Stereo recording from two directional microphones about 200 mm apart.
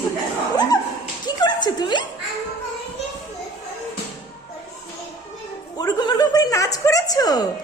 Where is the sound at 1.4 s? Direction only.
20° left (ahead or behind).